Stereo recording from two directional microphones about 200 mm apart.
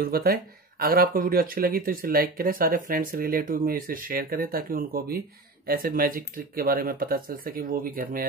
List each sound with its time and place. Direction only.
0.0 s speech: 50° right (ahead or behind)